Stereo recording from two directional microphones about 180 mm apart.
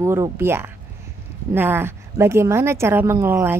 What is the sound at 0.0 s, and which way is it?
A woman's voice, 15° right (ahead or behind).